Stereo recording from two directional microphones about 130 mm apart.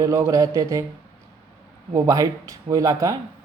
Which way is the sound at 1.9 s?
25° right (ahead or behind).